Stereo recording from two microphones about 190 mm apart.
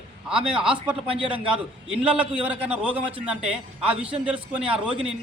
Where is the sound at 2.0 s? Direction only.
5° right (ahead or behind).